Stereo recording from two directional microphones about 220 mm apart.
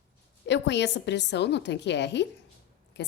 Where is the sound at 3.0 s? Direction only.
50° left (ahead or behind).